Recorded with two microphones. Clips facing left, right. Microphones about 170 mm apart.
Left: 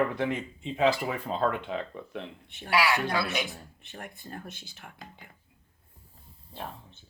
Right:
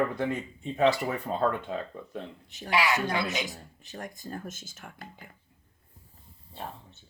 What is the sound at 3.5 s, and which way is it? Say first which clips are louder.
Speech: right 2 dB; 40° right (ahead or behind).